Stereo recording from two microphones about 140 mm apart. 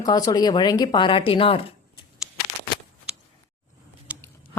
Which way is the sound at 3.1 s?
5° right (ahead or behind).